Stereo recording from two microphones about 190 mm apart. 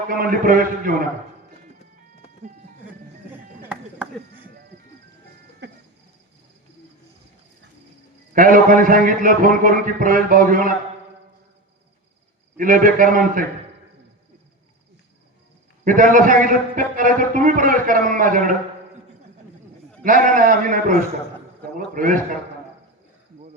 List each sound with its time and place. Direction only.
0.1 s a man's voice: 45° right (ahead or behind)
3.7 s chop: 5° right (ahead or behind)
5.6 s music: 65° right (ahead or behind)
8.3 s a man's voice: 45° right (ahead or behind)
12.5 s a man's voice: 45° right (ahead or behind)
15.8 s a man's voice: 45° right (ahead or behind)
20.1 s a man's voice: 45° right (ahead or behind)